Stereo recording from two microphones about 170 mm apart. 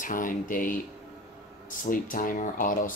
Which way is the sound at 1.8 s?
55° left (ahead or behind).